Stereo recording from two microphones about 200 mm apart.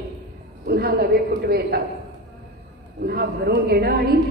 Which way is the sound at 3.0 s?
55° right (ahead or behind).